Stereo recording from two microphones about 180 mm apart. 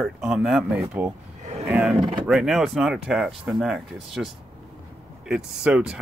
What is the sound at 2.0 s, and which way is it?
Speech, 30° right (ahead or behind).